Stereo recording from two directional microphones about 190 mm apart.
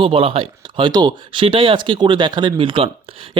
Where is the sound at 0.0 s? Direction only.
30° right (ahead or behind).